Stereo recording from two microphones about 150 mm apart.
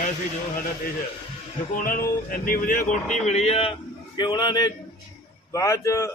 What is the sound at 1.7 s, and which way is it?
A man's voice, 70° left (ahead or behind).